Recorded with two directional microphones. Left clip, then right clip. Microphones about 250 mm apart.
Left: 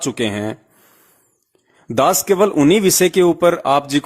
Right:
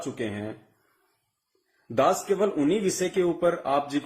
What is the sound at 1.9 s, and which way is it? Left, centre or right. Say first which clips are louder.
Speech: left 8 dB; left.